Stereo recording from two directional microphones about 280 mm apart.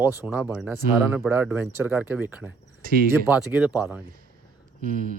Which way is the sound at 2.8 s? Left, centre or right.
Right.